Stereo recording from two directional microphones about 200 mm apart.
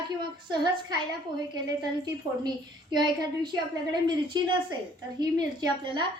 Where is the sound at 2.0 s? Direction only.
20° right (ahead or behind).